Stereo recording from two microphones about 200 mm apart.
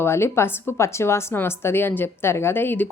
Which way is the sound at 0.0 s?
10° left (ahead or behind).